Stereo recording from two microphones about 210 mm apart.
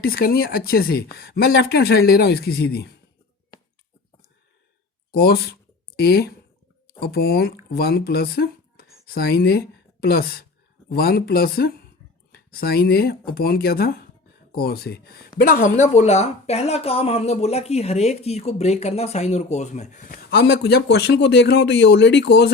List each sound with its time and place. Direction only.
0.0 s speech: 45° left (ahead or behind)
5.1 s speech: 50° left (ahead or behind)